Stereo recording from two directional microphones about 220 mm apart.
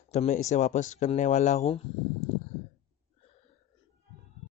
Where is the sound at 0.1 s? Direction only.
30° left (ahead or behind).